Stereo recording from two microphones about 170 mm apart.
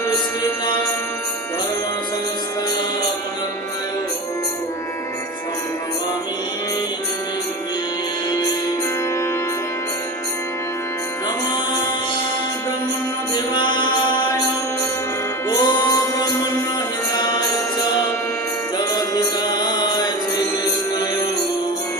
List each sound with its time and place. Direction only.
13.5 s mantra: 25° left (ahead or behind)
15.4 s music: 20° left (ahead or behind)
18.8 s chant: 25° left (ahead or behind)